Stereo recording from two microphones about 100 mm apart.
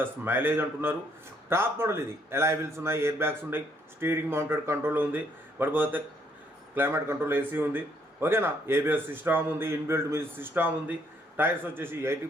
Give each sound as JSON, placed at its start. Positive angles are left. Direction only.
{"t": 0.0, "sound": "a man's voice", "side_deg": -20}